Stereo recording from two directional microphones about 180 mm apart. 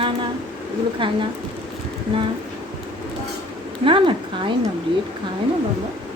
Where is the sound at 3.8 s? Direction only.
30° right (ahead or behind).